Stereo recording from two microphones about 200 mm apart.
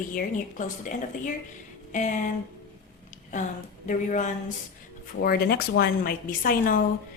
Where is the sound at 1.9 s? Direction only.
40° left (ahead or behind).